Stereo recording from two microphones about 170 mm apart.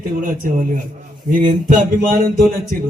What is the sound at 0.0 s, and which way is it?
A man's voice, 55° right (ahead or behind).